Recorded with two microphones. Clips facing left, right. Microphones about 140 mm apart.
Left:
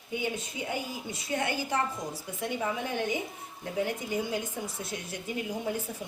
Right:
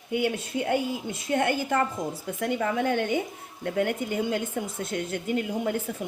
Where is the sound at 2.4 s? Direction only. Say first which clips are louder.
Right 6 dB; 65° right (ahead or behind).